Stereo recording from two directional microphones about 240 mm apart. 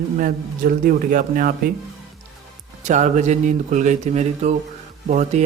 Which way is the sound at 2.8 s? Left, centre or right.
Right.